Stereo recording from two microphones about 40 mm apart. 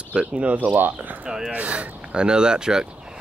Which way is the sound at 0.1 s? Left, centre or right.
Right.